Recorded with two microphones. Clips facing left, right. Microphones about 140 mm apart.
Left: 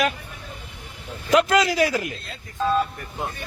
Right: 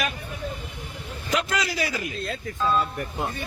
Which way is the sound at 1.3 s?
90° left.